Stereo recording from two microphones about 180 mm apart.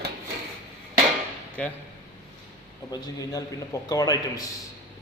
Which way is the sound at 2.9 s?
20° left (ahead or behind).